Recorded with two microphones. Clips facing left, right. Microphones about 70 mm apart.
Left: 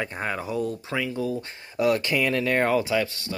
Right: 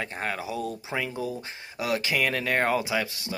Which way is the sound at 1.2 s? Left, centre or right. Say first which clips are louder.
Left 4 dB; centre.